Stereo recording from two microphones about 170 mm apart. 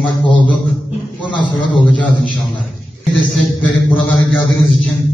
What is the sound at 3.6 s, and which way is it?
Speech, 10° left (ahead or behind).